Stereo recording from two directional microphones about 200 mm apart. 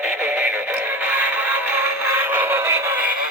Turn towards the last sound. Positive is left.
turn(degrees=-10)  # may be behind; listen again after turning